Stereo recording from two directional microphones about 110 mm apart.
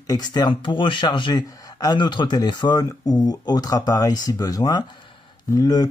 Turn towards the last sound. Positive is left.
turn(degrees=35)  # may be behind; listen again after turning